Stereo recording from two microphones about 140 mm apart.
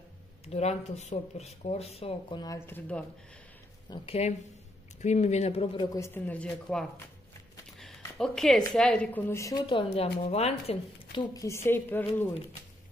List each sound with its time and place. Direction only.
0.5 s speech: 50° left (ahead or behind); by 2.7 s 25° left (ahead or behind)
2.9 s a woman's voice: 10° left (ahead or behind)
3.9 s speech: 45° left (ahead or behind)
5.9 s a woman's voice: 15° left (ahead or behind)
8.2 s a woman's voice: 5° left (ahead or behind)
9.3 s speech: 25° left (ahead or behind); by 11.2 s 40° left (ahead or behind)
11.3 s a woman's voice: 20° left (ahead or behind)